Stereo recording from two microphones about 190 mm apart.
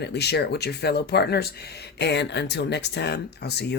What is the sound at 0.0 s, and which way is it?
Speech, 60° left (ahead or behind).